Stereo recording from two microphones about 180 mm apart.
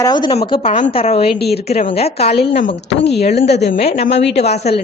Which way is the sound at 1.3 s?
65° left (ahead or behind).